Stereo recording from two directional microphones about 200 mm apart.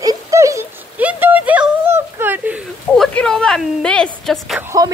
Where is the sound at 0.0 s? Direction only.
15° right (ahead or behind).